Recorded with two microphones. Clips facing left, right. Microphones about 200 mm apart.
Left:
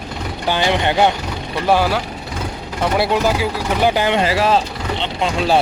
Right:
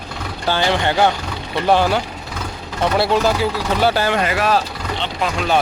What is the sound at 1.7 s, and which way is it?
Speech, 5° left (ahead or behind).